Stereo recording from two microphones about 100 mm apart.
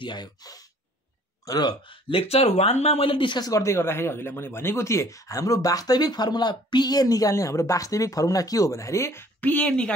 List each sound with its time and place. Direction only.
0.0 s speech: 45° left (ahead or behind)
2.0 s speech: 80° left; by 3.4 s 55° left (ahead or behind)
3.4 s speech: 30° left (ahead or behind); by 9.9 s 10° left (ahead or behind)